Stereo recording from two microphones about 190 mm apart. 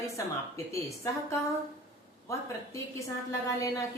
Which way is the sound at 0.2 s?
15° left (ahead or behind).